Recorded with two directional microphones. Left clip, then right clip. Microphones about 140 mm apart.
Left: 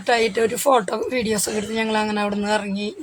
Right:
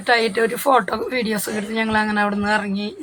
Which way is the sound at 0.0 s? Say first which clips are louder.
Right 1 dB; 20° left (ahead or behind).